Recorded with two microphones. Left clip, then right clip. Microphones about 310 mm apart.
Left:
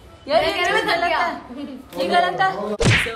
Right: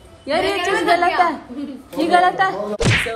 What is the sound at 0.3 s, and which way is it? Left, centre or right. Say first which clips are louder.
Speech: left 2 dB; left.